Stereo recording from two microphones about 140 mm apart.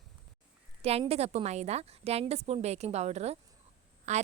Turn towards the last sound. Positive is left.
turn(degrees=-55)  # may be behind; listen again after turning